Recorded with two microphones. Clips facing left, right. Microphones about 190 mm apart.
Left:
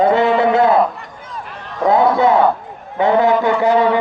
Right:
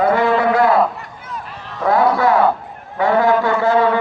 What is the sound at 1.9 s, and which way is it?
A man's voice, 20° left (ahead or behind).